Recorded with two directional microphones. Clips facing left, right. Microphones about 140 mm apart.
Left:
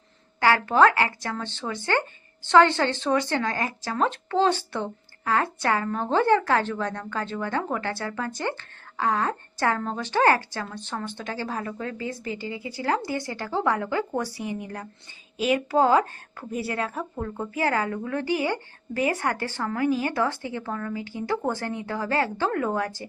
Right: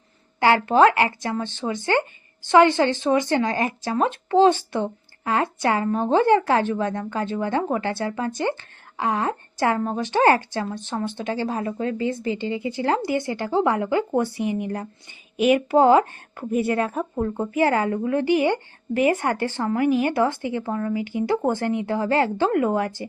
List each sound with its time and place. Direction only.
0.3 s speech: 20° right (ahead or behind)